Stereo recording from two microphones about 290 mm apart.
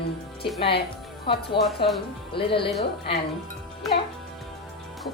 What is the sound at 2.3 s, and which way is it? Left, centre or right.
Speech, centre.